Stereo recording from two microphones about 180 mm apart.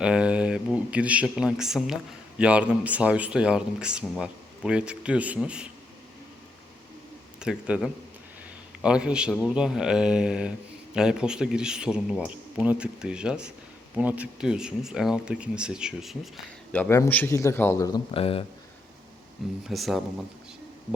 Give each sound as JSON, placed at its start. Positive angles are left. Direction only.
{"t": 0.0, "sound": "a man's voice", "side_deg": -5}
{"t": 7.3, "sound": "a man's voice", "side_deg": -5}
{"t": 16.7, "sound": "a man's voice", "side_deg": 10}
{"t": 18.1, "sound": "speech", "side_deg": 30}
{"t": 19.6, "sound": "a man's voice", "side_deg": 0}